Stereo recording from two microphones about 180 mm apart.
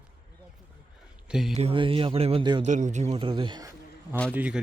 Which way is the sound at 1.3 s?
Centre (ahead or behind).